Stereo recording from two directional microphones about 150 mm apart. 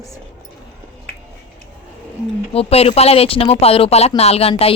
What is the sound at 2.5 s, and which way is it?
Speech, 40° left (ahead or behind).